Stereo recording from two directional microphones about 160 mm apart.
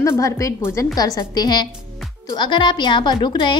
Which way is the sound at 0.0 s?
20° left (ahead or behind).